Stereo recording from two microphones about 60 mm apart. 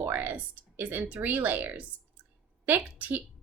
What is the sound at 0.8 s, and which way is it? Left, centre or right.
A woman's voice, right.